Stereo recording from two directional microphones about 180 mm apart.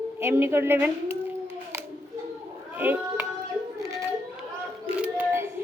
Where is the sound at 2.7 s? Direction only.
10° right (ahead or behind).